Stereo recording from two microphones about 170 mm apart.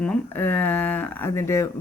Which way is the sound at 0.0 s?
10° left (ahead or behind).